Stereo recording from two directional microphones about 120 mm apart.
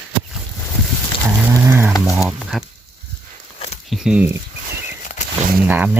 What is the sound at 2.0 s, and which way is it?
Speech, centre (ahead or behind).